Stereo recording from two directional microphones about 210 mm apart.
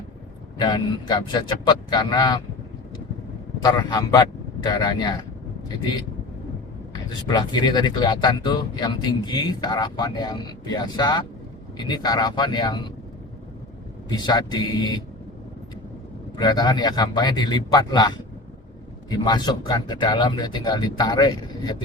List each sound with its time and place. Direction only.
0.6 s speech: 20° left (ahead or behind)
3.6 s speech: 20° left (ahead or behind)
7.3 s speech: 20° left (ahead or behind)
14.1 s speech: 20° left (ahead or behind)
16.4 s speech: 20° left (ahead or behind)